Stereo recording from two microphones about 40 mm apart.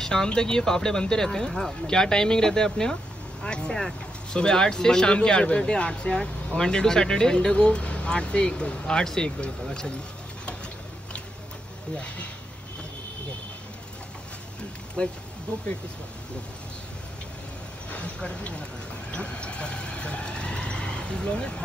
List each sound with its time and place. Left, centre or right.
0.0 s speech: centre
15.0 s speech: left
17.9 s speech: left